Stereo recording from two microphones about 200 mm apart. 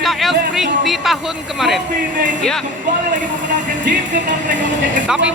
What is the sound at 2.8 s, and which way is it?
Speech, 40° right (ahead or behind).